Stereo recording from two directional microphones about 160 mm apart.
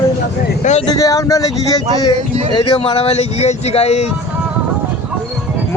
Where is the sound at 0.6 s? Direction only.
45° left (ahead or behind).